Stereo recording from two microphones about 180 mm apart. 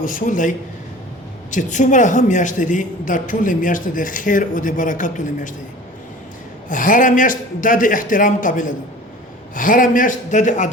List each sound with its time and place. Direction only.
0.0 s a man's voice: 45° left (ahead or behind)
6.7 s a man's voice: 50° left (ahead or behind)